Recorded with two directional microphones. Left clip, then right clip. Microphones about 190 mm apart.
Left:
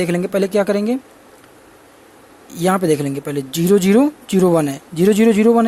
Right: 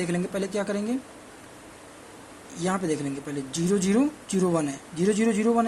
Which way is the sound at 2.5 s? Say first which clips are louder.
Left 12 dB; 50° left (ahead or behind).